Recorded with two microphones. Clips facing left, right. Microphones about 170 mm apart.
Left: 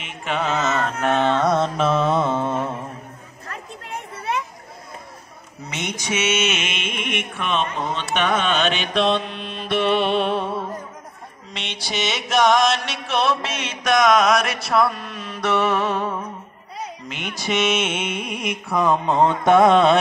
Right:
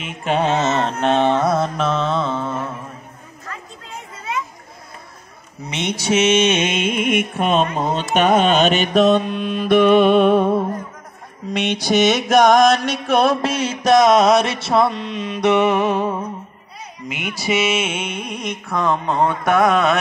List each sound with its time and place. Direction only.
0.2 s carnatic music: 35° right (ahead or behind); by 2.7 s 20° left (ahead or behind)
3.8 s children playing: 65° left (ahead or behind)
5.7 s mantra: 20° right (ahead or behind); by 20.0 s 30° left (ahead or behind)